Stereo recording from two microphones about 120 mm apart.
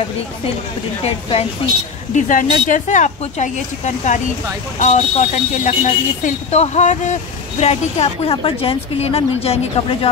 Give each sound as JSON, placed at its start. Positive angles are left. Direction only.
{"t": 1.6, "sound": "a woman's voice", "side_deg": 45}
{"t": 2.1, "sound": "speech", "side_deg": 90}
{"t": 4.8, "sound": "speech", "side_deg": 75}
{"t": 7.6, "sound": "a woman's voice", "side_deg": 55}